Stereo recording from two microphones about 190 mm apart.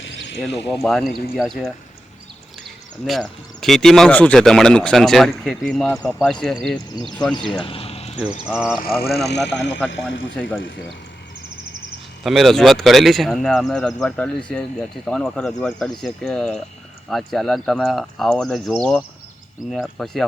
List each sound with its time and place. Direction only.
0.0 s a sound: 70° left (ahead or behind)
0.5 s speech: centre (ahead or behind)
7.6 s a sound: 30° left (ahead or behind)
8.4 s speech: 5° right (ahead or behind)
9.1 s speech: 60° left (ahead or behind)
9.4 s speech: 10° left (ahead or behind)
10.1 s speech: 90° left
12.2 s speech: centre (ahead or behind)